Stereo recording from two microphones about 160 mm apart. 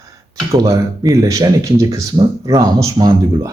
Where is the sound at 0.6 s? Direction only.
20° right (ahead or behind).